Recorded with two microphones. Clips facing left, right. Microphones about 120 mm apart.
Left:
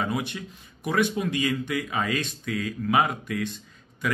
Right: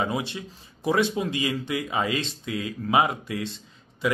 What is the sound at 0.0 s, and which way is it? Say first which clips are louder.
Speech: right 1 dB; 25° right (ahead or behind).